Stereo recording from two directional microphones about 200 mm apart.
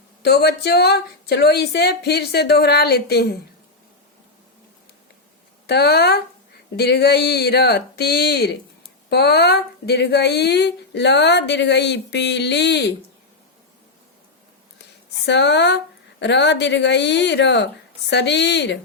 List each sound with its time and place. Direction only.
0.2 s a woman's voice: 55° left (ahead or behind)
5.6 s a woman's voice: 55° left (ahead or behind)
15.3 s speech: 60° left (ahead or behind)